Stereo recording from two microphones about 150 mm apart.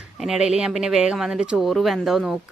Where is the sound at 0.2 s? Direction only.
5° right (ahead or behind).